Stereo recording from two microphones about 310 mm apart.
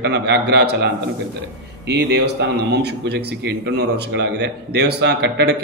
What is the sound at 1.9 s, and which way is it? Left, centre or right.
A man's voice, right.